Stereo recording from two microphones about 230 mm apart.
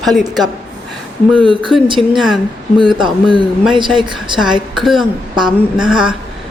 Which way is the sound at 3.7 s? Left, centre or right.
Right.